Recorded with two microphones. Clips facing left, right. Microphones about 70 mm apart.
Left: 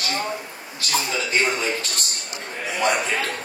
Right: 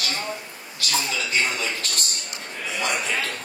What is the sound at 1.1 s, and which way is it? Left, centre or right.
Speech, left.